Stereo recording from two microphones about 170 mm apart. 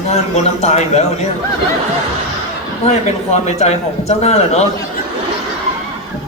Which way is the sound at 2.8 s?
40° left (ahead or behind).